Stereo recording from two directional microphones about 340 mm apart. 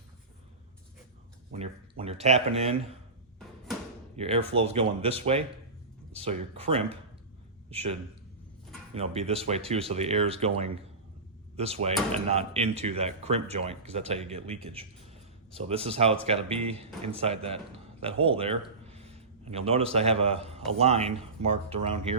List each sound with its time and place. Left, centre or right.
1.5 s speech: centre
4.2 s speech: centre
9.0 s speech: centre